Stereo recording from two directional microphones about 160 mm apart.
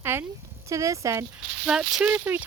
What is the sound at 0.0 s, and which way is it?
Speech, 15° right (ahead or behind).